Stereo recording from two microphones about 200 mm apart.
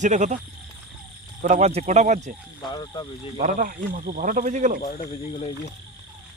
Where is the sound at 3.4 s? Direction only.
45° right (ahead or behind).